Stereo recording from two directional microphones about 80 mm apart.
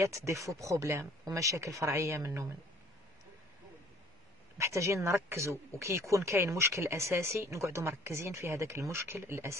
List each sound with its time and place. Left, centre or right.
0.0 s speech: right
4.6 s speech: right